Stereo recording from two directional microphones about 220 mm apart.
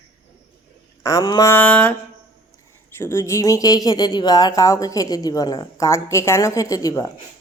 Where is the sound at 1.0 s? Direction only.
15° left (ahead or behind).